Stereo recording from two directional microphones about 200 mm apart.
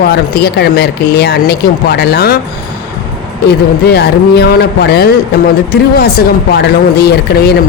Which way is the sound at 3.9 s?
55° left (ahead or behind).